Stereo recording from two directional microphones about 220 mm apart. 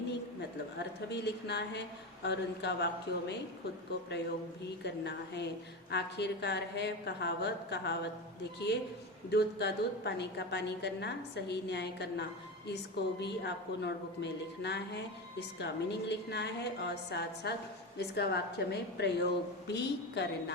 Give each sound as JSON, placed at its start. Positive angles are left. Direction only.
{"t": 0.8, "sound": "a woman's voice", "side_deg": 50}
{"t": 4.8, "sound": "a woman's voice", "side_deg": 50}